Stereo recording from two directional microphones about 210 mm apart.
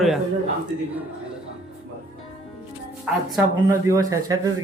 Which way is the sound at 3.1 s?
5° right (ahead or behind).